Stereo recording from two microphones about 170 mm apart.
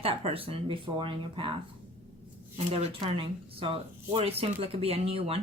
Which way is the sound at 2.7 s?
35° right (ahead or behind).